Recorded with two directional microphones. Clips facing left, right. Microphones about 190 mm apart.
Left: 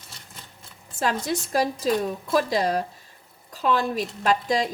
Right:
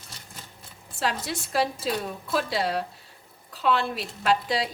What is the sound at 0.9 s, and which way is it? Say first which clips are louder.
Speech: left 4 dB; 45° left (ahead or behind).